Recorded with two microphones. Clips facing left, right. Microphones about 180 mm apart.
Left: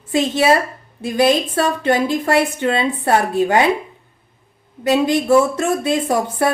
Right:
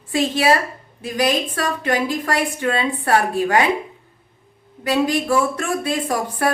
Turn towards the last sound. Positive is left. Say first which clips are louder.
# left 3 dB
turn(degrees=25)  # may be behind; listen again after turning